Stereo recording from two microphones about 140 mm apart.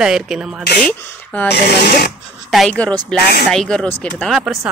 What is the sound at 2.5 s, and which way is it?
Speech, 5° left (ahead or behind).